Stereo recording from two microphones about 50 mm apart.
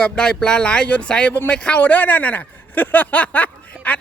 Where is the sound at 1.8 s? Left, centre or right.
Left.